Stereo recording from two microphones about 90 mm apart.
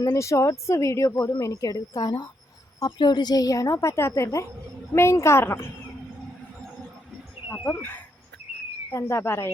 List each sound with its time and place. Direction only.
0.0 s a woman's voice: 40° left (ahead or behind)
7.6 s a woman's voice: 25° left (ahead or behind)